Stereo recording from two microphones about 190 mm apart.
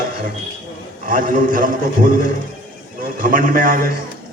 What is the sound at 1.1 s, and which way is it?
A man's voice, 45° right (ahead or behind).